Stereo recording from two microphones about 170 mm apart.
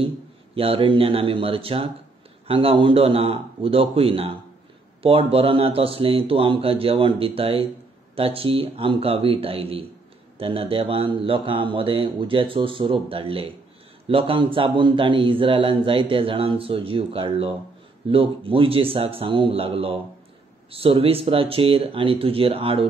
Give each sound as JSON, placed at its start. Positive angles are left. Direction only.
{"t": 0.6, "sound": "a man's voice", "side_deg": -35}